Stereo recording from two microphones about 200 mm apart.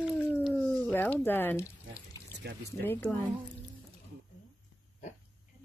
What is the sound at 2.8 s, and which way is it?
Speech, 10° left (ahead or behind).